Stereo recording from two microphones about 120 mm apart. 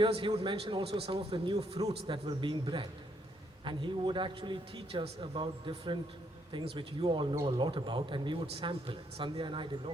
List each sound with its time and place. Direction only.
0.0 s a man's voice: 50° right (ahead or behind)